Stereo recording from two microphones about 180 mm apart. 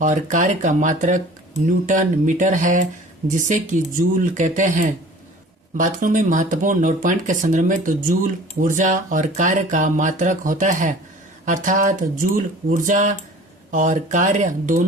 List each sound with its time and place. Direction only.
0.0 s speech: 45° right (ahead or behind)